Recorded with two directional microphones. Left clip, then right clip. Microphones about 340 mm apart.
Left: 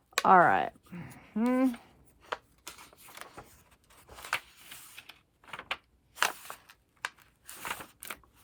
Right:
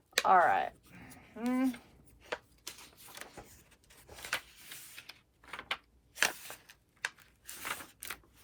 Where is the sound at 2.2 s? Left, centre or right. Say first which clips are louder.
Left 3 dB; centre.